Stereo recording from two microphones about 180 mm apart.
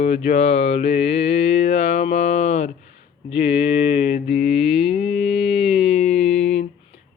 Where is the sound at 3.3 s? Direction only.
30° left (ahead or behind).